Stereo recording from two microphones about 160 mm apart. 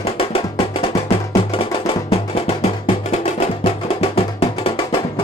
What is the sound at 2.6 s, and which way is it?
Music, 40° left (ahead or behind).